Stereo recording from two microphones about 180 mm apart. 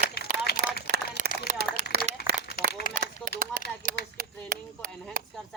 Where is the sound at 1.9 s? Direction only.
60° right (ahead or behind).